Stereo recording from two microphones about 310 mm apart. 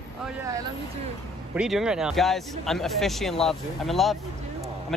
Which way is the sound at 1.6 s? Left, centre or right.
Centre.